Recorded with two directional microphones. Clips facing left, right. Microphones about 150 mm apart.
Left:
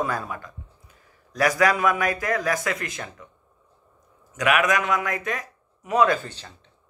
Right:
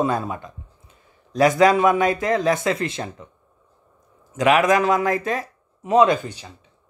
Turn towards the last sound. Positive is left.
turn(degrees=-10)  # may be behind; listen again after turning